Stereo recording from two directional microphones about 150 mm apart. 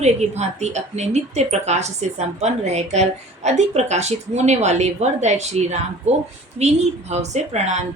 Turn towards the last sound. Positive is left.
turn(degrees=-50)  # may be behind; listen again after turning